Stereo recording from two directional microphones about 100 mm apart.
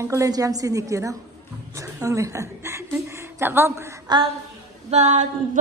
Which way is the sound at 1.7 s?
30° right (ahead or behind).